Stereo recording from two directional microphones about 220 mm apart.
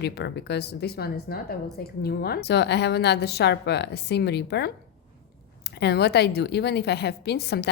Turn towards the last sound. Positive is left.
turn(degrees=50)  # may be behind; listen again after turning